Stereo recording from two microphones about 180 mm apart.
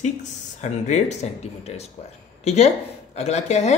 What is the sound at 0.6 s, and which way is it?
Speech, 40° left (ahead or behind).